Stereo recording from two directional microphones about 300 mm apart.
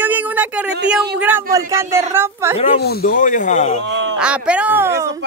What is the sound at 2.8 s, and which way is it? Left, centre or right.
Speech, left.